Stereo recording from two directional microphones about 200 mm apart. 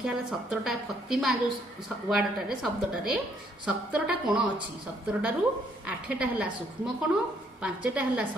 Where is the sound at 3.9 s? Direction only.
5° right (ahead or behind).